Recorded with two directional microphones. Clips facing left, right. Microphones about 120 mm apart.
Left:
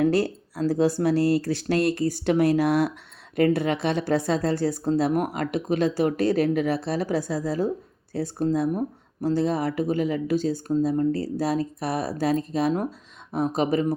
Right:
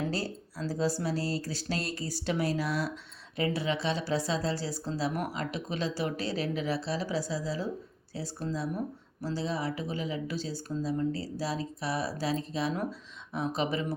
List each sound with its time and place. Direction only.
0.0 s speech: 60° left (ahead or behind); by 13.9 s 45° left (ahead or behind)